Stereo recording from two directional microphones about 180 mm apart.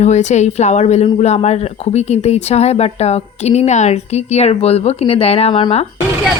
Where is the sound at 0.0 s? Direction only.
40° left (ahead or behind).